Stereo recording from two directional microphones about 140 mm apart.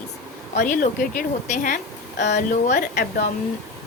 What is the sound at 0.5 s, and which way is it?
A woman's voice, 75° left (ahead or behind).